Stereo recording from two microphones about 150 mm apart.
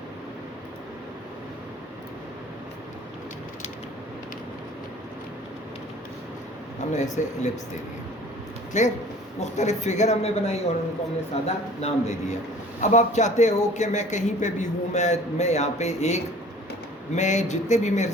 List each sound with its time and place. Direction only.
6.9 s speech: 50° left (ahead or behind)
8.7 s speech: 50° left (ahead or behind)